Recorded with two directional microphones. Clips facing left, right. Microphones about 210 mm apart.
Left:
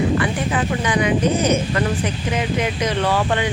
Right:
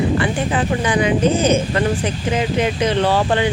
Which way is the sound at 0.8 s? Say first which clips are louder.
Right 2 dB; 30° right (ahead or behind).